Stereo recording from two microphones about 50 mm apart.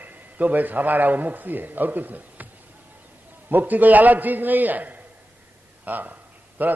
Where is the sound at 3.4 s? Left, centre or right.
Right.